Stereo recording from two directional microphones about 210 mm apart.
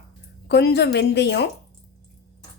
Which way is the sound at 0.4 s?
50° left (ahead or behind).